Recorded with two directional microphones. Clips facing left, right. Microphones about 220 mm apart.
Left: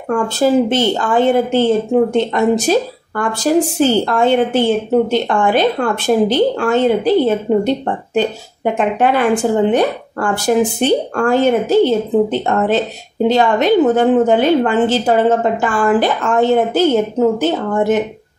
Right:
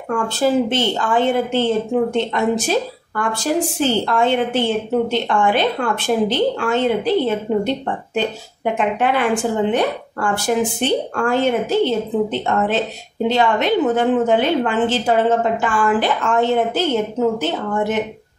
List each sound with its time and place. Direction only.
0.1 s a woman's voice: 40° left (ahead or behind)